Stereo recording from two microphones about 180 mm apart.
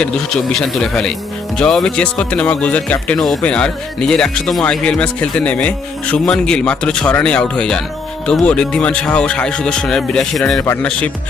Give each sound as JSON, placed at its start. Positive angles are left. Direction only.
{"t": 0.5, "sound": "speech", "side_deg": 5}